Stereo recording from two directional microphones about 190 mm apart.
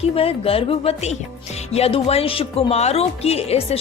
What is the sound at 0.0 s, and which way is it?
Speech, 30° left (ahead or behind).